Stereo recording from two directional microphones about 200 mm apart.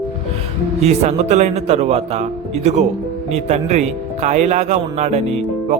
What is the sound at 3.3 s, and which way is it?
Speech, 35° right (ahead or behind).